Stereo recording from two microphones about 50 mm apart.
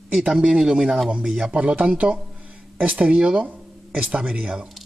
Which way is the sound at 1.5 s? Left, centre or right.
Right.